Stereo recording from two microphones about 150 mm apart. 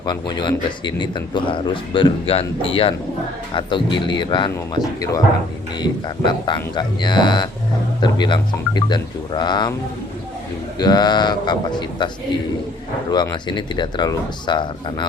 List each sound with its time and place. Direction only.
0.0 s speech: 30° left (ahead or behind)
5.8 s speech: 30° left (ahead or behind)
10.8 s speech: 25° left (ahead or behind)